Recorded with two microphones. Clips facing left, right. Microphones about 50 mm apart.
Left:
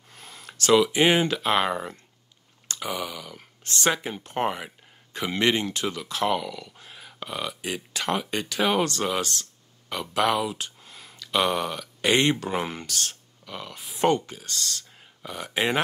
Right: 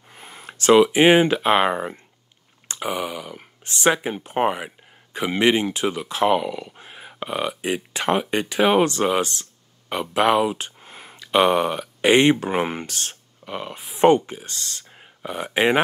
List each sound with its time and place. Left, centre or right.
0.1 s speech: right